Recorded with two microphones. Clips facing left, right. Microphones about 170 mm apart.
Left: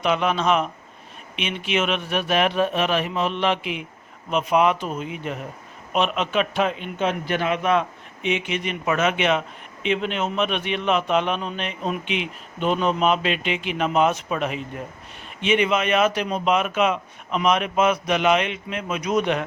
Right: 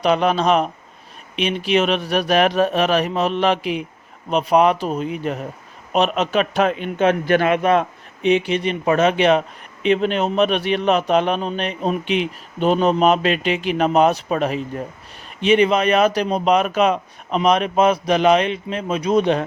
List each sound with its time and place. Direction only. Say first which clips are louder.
0.0 s a man's voice: right 4 dB; 35° right (ahead or behind)
7.0 s a man's voice: right 7 dB; 60° right (ahead or behind)
7.6 s a man's voice: right 4 dB; 40° right (ahead or behind)